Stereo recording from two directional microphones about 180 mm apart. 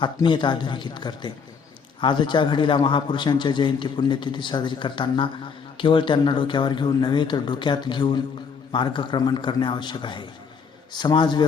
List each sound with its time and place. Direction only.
0.0 s a man's voice: 25° left (ahead or behind)